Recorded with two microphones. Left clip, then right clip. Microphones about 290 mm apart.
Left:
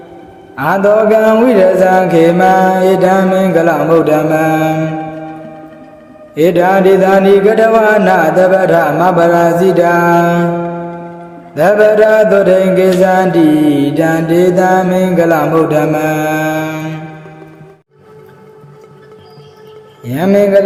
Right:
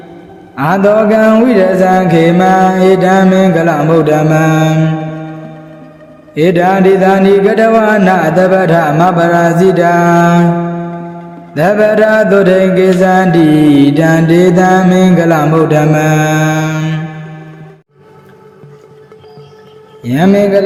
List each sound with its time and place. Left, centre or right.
0.5 s mantra: right
6.3 s mantra: right
11.5 s mantra: right
20.1 s mantra: right